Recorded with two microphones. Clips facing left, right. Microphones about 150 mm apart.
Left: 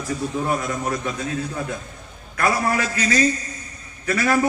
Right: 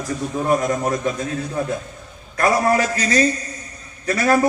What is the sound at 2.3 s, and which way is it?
A man's voice, 35° right (ahead or behind).